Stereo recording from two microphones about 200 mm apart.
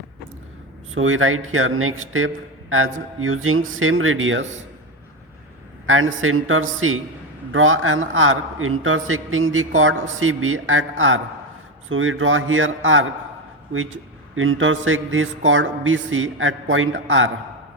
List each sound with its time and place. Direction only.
0.9 s a man's voice: 85° right
5.8 s a man's voice: 85° right
14.3 s a man's voice: 80° right